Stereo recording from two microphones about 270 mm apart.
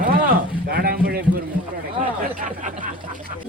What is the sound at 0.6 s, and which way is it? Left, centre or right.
Speech, right.